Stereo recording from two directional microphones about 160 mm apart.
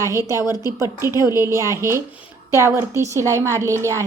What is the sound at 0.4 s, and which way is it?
Speech, 25° left (ahead or behind).